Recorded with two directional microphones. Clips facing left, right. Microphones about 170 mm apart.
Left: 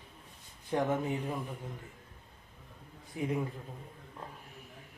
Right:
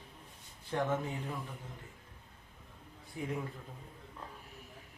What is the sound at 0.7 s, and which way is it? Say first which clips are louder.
Speech: left 3 dB; 15° left (ahead or behind).